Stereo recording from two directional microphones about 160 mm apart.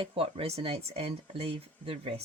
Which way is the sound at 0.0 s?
35° right (ahead or behind).